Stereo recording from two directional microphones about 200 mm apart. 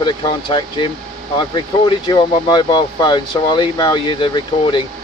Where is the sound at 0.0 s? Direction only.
20° left (ahead or behind).